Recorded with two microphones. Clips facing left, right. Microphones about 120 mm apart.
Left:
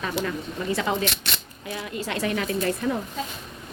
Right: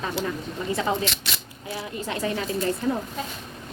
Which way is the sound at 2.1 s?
20° right (ahead or behind).